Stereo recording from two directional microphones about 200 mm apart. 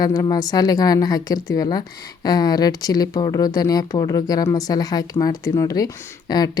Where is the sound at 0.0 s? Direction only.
20° left (ahead or behind).